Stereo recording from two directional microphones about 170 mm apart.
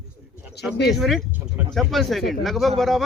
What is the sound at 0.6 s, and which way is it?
Speech, 75° left (ahead or behind).